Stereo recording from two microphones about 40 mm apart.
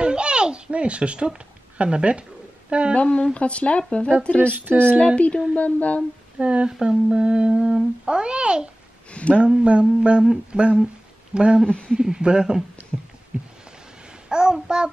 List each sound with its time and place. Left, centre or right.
0.0 s a sound: right
2.7 s humming: right
3.0 s a woman's voice: left
6.4 s humming: right
9.1 s a sound: left
9.4 s humming: right
14.3 s babbling: centre